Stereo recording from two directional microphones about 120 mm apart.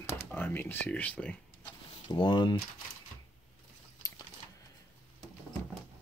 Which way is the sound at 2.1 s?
40° left (ahead or behind).